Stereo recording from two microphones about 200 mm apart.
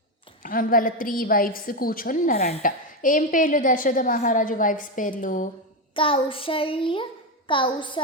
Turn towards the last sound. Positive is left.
turn(degrees=25)  # may be behind; listen again after turning